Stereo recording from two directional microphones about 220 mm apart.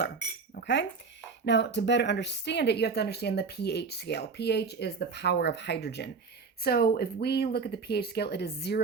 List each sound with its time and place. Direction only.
0.5 s cutlery: 55° left (ahead or behind)
1.5 s speech: 55° left (ahead or behind)